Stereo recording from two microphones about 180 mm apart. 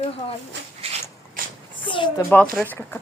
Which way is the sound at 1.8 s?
25° left (ahead or behind).